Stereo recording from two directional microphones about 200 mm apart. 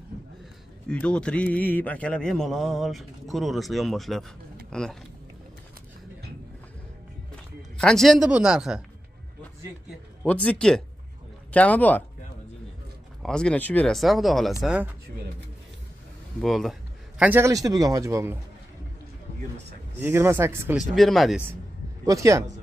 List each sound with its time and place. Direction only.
0.8 s speech: 5° left (ahead or behind)
7.7 s speech: 5° left (ahead or behind)
10.2 s speech: 5° left (ahead or behind)
13.2 s speech: 5° left (ahead or behind)
16.3 s speech: centre (ahead or behind)
17.2 s a man's voice: 10° right (ahead or behind)
20.0 s a man's voice: 10° right (ahead or behind)
20.9 s speech: centre (ahead or behind)
22.0 s a man's voice: 15° right (ahead or behind)